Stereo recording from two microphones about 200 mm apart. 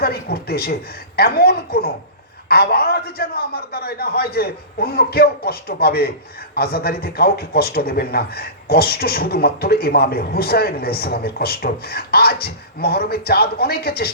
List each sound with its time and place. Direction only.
0.0 s a woman's voice: 50° left (ahead or behind)